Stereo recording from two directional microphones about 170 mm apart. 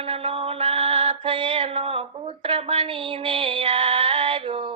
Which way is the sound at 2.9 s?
30° right (ahead or behind).